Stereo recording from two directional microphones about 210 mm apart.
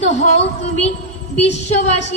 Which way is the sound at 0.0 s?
30° left (ahead or behind).